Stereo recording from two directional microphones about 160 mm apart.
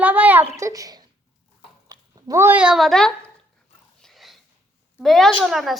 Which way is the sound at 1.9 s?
25° right (ahead or behind).